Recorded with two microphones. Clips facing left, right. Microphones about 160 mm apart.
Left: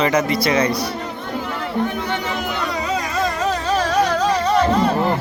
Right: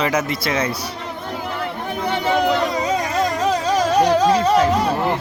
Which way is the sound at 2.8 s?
20° right (ahead or behind).